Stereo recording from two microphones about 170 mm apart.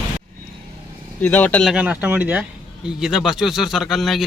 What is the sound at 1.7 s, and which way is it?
A man's voice, 10° right (ahead or behind).